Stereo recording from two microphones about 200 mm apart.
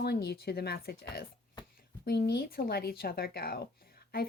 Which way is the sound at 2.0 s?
55° left (ahead or behind).